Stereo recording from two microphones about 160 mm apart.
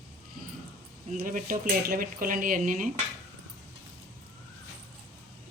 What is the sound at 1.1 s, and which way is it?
Speech, 60° right (ahead or behind).